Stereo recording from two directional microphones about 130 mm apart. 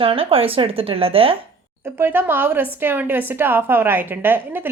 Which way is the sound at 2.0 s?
15° right (ahead or behind).